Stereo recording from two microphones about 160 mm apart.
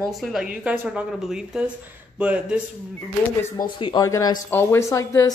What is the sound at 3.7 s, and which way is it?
Speech, 30° left (ahead or behind).